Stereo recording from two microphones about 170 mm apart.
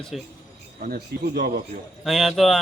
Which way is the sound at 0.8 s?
60° right (ahead or behind).